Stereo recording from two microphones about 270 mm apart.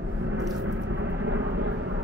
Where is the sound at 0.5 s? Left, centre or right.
Right.